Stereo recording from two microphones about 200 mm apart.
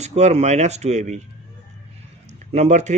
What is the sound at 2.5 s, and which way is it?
Speech, 35° right (ahead or behind).